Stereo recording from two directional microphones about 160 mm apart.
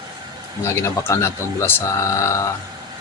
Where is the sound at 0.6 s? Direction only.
15° left (ahead or behind).